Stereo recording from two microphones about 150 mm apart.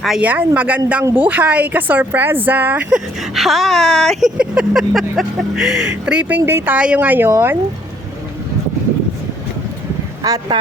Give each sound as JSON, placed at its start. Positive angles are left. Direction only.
{"t": 0.0, "sound": "speech", "side_deg": -5}
{"t": 10.2, "sound": "speech", "side_deg": -25}